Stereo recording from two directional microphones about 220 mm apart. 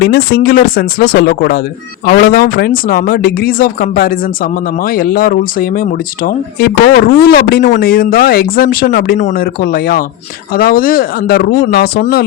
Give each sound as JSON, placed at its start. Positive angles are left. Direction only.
{"t": 0.0, "sound": "speech", "side_deg": 45}